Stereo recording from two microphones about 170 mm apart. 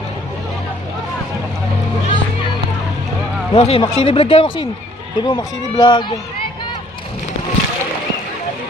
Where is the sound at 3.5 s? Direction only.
35° left (ahead or behind).